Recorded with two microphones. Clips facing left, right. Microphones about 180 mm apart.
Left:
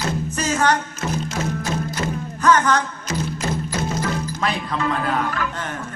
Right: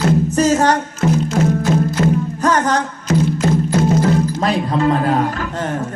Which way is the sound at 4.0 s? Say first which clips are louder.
Right 8 dB; 40° right (ahead or behind).